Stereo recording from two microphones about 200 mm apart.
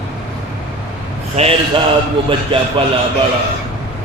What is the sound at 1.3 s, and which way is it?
A man's voice, 30° right (ahead or behind).